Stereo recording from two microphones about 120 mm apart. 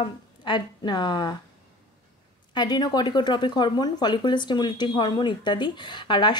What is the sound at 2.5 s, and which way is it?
Speech, 35° left (ahead or behind).